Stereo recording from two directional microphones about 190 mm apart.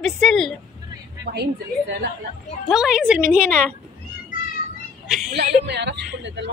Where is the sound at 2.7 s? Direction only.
5° right (ahead or behind).